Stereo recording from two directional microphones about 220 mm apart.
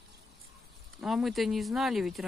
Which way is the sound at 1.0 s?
Centre (ahead or behind).